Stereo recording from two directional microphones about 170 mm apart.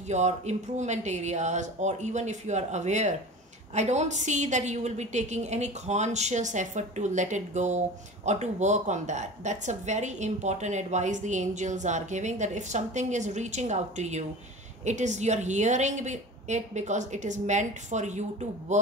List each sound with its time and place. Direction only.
0.1 s speech: 40° right (ahead or behind)